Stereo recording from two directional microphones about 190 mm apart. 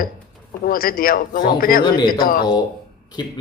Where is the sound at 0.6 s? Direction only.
50° left (ahead or behind).